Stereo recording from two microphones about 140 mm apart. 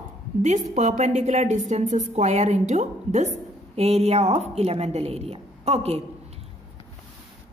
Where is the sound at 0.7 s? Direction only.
55° right (ahead or behind).